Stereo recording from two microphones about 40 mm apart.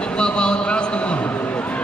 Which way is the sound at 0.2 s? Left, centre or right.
Left.